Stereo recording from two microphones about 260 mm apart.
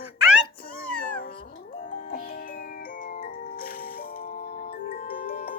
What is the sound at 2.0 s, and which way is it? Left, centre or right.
Music, left.